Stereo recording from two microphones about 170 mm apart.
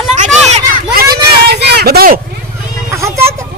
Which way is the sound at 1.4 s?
70° right (ahead or behind).